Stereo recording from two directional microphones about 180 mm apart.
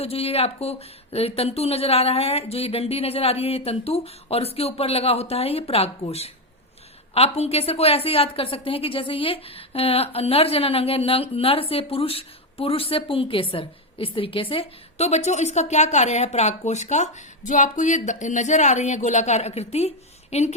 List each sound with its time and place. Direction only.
0.0 s a woman's voice: 35° left (ahead or behind)